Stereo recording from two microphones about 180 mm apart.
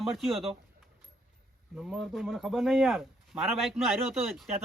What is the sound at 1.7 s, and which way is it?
Speech, centre (ahead or behind).